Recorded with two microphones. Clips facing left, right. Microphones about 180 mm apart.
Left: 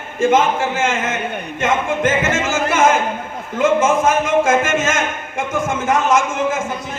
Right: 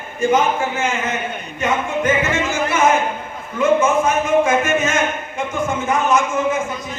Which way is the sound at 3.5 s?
90° left.